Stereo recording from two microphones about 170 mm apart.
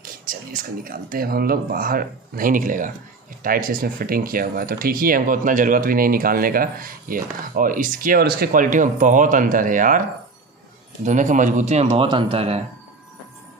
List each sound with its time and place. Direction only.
0.0 s speech: 55° right (ahead or behind)
11.1 s speech: 45° right (ahead or behind)